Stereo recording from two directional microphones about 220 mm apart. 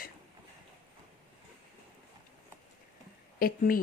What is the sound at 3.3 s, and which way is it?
Speech, 40° left (ahead or behind).